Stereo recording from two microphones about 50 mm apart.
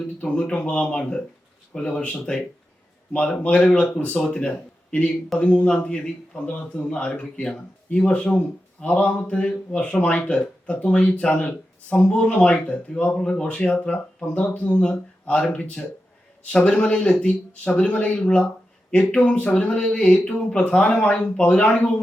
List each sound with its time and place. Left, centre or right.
0.5 s a man's voice: left
2.1 s a man's voice: centre